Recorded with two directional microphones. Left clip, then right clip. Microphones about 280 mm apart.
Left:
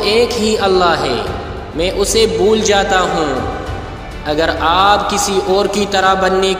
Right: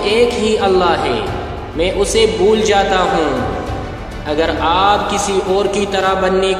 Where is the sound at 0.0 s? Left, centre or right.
Left.